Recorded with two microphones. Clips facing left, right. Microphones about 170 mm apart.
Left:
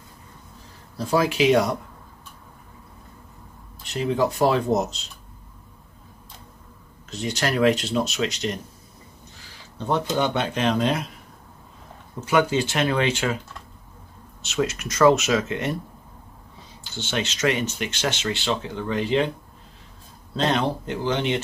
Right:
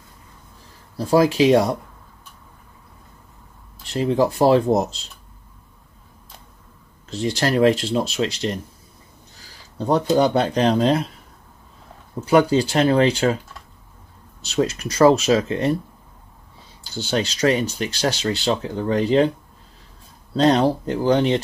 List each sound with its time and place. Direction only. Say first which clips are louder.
0.9 s speech: right 5 dB; 35° right (ahead or behind)
3.9 s speech: right 4 dB; 35° right (ahead or behind)
7.1 s speech: right 4 dB; 35° right (ahead or behind)
9.8 s speech: right 6 dB; 35° right (ahead or behind)
12.3 s speech: right 5 dB; 35° right (ahead or behind)
14.4 s speech: right 4 dB; 35° right (ahead or behind)
16.8 s speech: right 5 dB; 35° right (ahead or behind)
20.3 s speech: right 7 dB; 35° right (ahead or behind)